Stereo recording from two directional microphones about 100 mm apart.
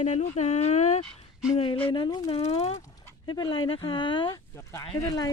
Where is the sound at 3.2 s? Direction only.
50° left (ahead or behind).